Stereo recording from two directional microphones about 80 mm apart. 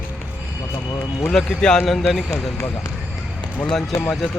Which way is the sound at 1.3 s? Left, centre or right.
Centre.